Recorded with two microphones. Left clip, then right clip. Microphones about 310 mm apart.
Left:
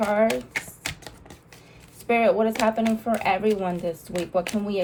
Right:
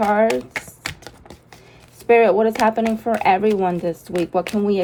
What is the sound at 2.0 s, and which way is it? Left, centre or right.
Speech, right.